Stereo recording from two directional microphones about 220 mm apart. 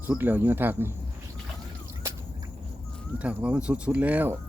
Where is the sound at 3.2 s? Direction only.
5° right (ahead or behind).